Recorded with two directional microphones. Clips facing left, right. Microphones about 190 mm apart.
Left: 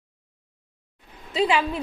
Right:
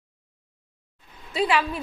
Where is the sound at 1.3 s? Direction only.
25° left (ahead or behind).